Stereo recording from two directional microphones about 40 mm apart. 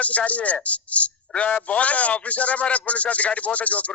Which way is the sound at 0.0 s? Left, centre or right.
Left.